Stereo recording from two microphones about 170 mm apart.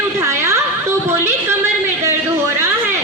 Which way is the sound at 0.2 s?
15° right (ahead or behind).